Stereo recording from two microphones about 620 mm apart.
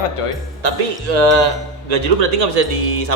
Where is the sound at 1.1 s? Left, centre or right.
Right.